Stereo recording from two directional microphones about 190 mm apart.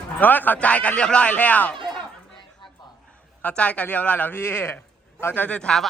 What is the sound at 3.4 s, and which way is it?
Speech, 5° left (ahead or behind).